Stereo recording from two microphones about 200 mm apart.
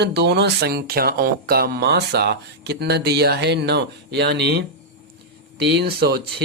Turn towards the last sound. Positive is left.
turn(degrees=-55)  # may be behind; listen again after turning